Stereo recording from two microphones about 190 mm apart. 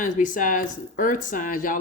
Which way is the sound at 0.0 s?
45° left (ahead or behind).